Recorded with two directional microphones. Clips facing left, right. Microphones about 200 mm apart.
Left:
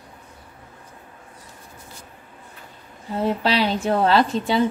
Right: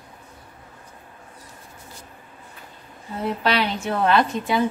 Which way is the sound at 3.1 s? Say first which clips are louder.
Left 2 dB; 30° left (ahead or behind).